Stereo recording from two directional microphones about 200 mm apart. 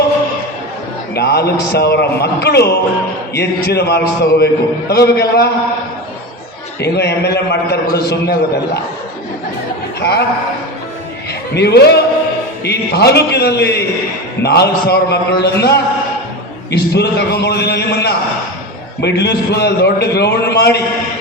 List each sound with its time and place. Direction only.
1.1 s a man's voice: 55° left (ahead or behind)
6.7 s a man's voice: 55° left (ahead or behind)
10.0 s a man's voice: 55° left (ahead or behind)
11.5 s a man's voice: 55° left (ahead or behind)